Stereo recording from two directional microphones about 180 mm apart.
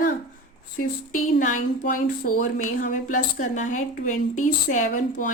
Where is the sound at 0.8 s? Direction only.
45° left (ahead or behind).